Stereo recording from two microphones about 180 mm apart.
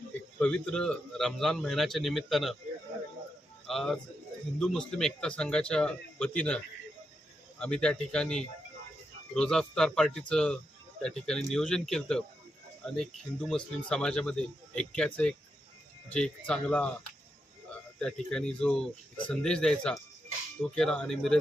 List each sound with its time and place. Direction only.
0.3 s speech: 5° left (ahead or behind)
3.7 s speech: centre (ahead or behind)
7.6 s speech: 5° left (ahead or behind)
18.0 s speech: 5° left (ahead or behind)